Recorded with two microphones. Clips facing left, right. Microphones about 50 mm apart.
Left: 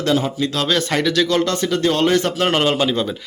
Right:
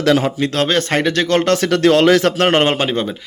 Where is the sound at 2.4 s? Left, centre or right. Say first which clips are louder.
Right 3 dB; right.